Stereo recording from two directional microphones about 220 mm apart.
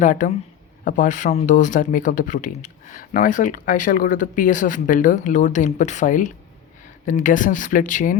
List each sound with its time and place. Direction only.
0.0 s speech: 35° left (ahead or behind)